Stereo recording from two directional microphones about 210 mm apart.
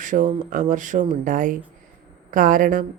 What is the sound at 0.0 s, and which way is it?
A woman's voice, 40° right (ahead or behind).